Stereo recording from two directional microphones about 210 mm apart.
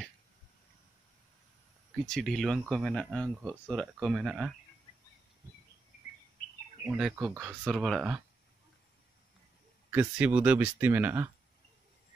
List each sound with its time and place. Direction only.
2.0 s speech: centre (ahead or behind)
6.9 s speech: centre (ahead or behind)
9.8 s speech: 5° right (ahead or behind)